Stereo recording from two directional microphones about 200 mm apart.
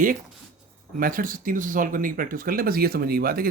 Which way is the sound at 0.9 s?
45° right (ahead or behind).